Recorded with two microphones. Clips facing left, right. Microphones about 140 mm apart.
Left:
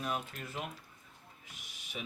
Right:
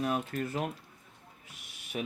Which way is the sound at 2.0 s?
60° right (ahead or behind).